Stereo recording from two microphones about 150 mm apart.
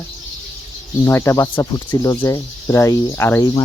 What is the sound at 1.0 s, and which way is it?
Speech, 20° left (ahead or behind).